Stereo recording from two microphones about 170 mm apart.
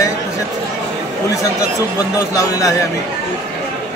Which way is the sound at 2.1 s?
20° left (ahead or behind).